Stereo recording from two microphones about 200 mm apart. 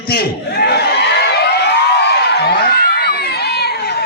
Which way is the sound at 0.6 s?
55° left (ahead or behind).